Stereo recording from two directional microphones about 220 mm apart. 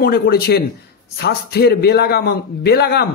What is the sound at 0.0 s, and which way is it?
Speech, 45° left (ahead or behind).